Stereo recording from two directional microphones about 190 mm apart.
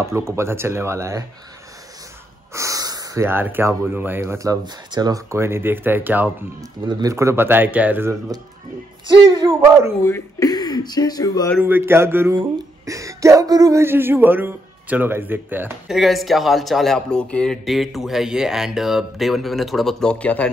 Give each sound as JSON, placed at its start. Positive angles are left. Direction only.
{"t": 0.0, "sound": "speech", "side_deg": -15}
{"t": 2.5, "sound": "speech", "side_deg": -15}
{"t": 9.0, "sound": "speech", "side_deg": -25}
{"t": 10.0, "sound": "speech", "side_deg": 15}
{"t": 11.6, "sound": "speech", "side_deg": -10}